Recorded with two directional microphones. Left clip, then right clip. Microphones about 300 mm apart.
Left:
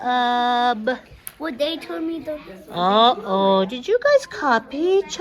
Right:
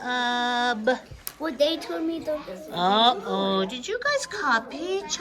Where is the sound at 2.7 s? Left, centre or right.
Centre.